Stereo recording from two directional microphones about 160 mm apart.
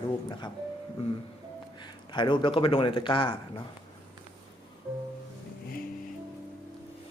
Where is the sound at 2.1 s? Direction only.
30° left (ahead or behind).